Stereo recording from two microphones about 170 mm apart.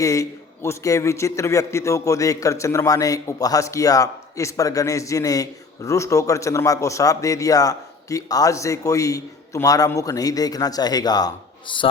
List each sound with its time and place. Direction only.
0.0 s a man's voice: 20° left (ahead or behind)